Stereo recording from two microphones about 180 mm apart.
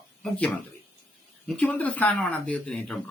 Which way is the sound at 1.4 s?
5° left (ahead or behind).